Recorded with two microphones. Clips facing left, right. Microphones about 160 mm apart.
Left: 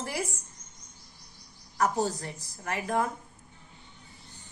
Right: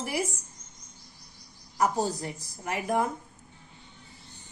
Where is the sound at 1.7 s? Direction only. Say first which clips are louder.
Right 1 dB; 15° right (ahead or behind).